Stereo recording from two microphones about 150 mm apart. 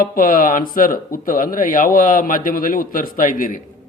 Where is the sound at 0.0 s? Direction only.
70° left (ahead or behind).